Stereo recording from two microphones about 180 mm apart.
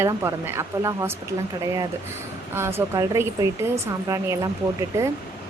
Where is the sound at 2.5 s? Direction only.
15° right (ahead or behind).